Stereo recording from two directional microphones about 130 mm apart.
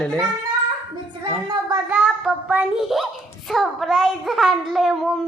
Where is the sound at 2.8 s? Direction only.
Centre (ahead or behind).